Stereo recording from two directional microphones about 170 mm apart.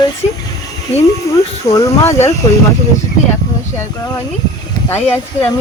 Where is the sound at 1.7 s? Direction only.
20° left (ahead or behind).